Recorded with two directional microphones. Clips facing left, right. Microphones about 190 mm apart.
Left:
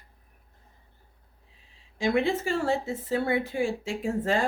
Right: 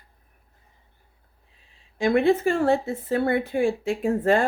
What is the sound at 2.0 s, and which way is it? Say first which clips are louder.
A woman's voice: right 6 dB; 55° right (ahead or behind).